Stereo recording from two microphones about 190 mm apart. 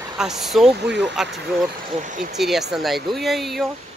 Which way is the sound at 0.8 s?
65° right (ahead or behind).